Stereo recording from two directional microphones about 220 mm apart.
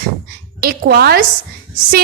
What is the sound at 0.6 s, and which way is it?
Speech, 45° right (ahead or behind).